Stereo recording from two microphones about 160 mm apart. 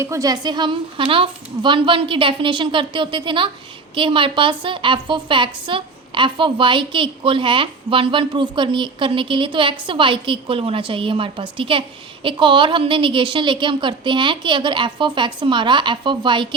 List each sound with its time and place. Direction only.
0.0 s a woman's voice: 20° right (ahead or behind)